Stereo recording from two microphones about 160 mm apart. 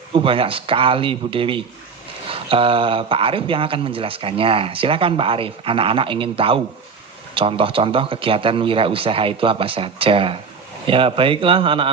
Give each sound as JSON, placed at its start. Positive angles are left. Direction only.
{"t": 0.1, "sound": "speech", "side_deg": -35}